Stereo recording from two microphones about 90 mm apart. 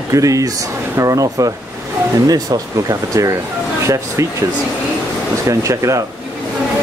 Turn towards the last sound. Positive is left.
turn(degrees=-35)  # may be behind; listen again after turning